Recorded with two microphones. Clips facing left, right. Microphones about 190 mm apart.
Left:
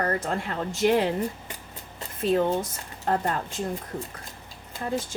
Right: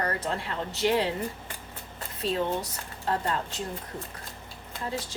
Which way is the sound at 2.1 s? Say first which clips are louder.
Left 5 dB; 50° left (ahead or behind).